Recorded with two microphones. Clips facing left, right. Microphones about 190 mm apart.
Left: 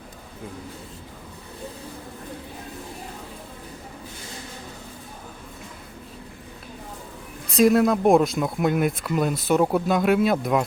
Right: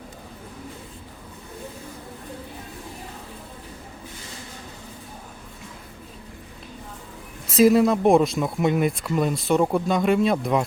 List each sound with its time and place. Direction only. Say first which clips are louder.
7.5 s speech: right 1 dB; centre (ahead or behind)